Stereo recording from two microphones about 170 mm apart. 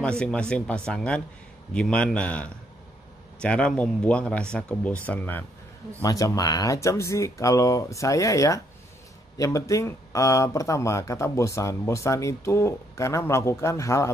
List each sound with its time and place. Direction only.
0.0 s speech: 5° left (ahead or behind)
6.0 s speech: 20° left (ahead or behind)